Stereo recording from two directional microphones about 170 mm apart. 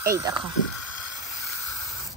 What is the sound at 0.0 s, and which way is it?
Speech, 20° right (ahead or behind).